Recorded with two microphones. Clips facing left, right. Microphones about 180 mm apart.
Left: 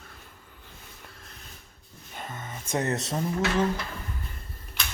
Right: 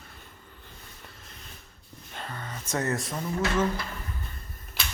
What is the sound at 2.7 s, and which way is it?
Speech, 20° left (ahead or behind).